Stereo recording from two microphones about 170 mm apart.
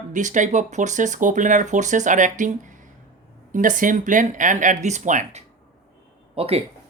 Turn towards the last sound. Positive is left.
turn(degrees=-35)  # may be behind; listen again after turning